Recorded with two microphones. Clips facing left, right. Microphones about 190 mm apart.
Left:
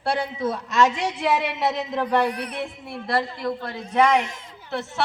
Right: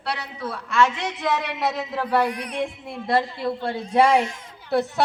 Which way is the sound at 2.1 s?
10° right (ahead or behind).